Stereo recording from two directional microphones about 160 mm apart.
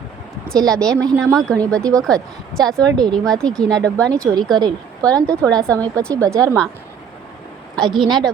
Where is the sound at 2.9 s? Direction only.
25° right (ahead or behind).